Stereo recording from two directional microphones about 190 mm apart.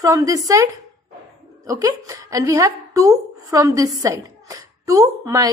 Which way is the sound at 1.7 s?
20° right (ahead or behind).